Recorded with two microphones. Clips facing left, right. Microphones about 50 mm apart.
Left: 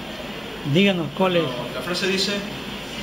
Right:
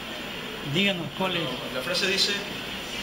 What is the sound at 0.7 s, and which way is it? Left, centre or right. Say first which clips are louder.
A man's voice: left 7 dB; centre.